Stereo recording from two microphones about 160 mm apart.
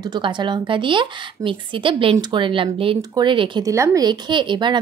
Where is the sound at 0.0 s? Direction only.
25° right (ahead or behind).